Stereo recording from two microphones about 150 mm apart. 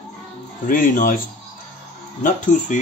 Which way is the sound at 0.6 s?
65° left (ahead or behind).